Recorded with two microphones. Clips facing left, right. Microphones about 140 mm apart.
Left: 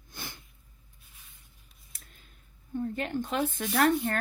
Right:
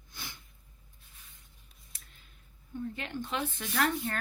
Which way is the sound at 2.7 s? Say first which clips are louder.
Left 6 dB; 45° left (ahead or behind).